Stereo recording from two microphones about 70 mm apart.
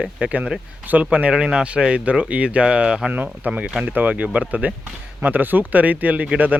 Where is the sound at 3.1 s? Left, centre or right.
Right.